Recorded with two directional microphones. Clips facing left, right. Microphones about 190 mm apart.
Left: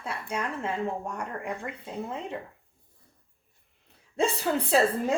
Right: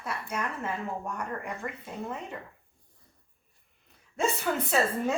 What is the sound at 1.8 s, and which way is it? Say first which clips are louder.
Speech: left 2 dB; 25° left (ahead or behind).